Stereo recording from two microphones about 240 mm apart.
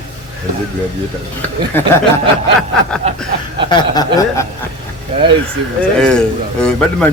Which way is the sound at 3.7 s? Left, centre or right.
Centre.